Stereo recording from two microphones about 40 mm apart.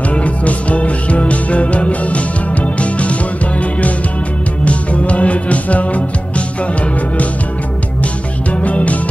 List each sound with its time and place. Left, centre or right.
0.1 s music: left
4.6 s music: left
8.5 s music: left